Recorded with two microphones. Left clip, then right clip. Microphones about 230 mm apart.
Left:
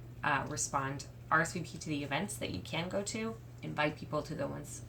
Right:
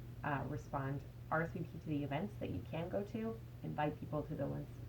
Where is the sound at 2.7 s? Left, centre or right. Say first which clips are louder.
Left 5 dB; left.